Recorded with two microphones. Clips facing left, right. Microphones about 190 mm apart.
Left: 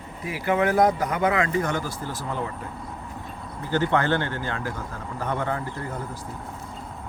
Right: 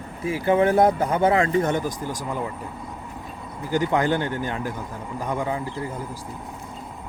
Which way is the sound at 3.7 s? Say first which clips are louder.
Right 1 dB; 15° right (ahead or behind).